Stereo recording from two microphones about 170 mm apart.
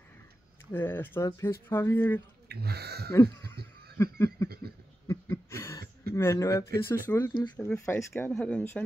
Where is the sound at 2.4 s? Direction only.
70° right (ahead or behind).